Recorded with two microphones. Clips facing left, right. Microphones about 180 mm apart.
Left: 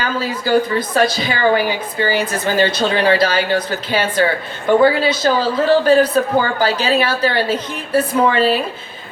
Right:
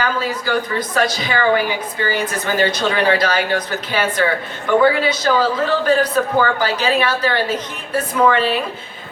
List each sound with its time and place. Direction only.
0.0 s a woman's voice: 30° left (ahead or behind)